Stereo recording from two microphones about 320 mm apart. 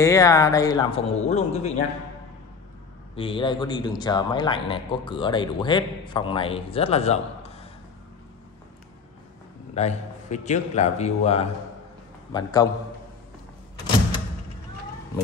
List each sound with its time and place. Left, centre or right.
0.0 s a man's voice: centre
3.2 s a man's voice: centre
9.8 s a man's voice: left